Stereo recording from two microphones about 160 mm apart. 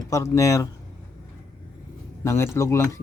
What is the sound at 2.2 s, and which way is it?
Speech, 15° left (ahead or behind).